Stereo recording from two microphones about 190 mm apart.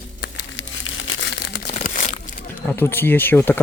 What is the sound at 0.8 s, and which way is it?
Crumpling, 85° left.